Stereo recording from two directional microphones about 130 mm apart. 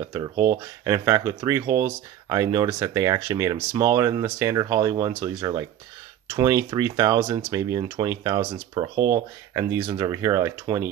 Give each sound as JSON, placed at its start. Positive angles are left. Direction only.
{"t": 0.1, "sound": "speech", "side_deg": -20}